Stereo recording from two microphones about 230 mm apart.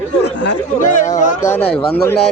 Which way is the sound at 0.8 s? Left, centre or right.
Left.